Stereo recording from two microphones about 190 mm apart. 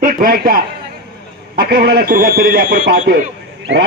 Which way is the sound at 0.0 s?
50° right (ahead or behind).